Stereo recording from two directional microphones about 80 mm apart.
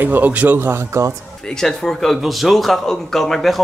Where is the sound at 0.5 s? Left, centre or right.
Right.